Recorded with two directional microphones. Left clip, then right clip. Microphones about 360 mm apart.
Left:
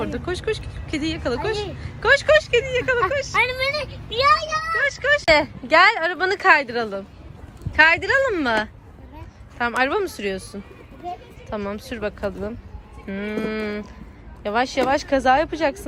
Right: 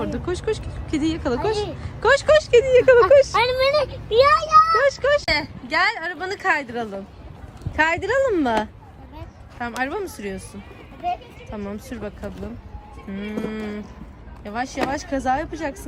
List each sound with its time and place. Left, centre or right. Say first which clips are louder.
0.0 s speech: even; centre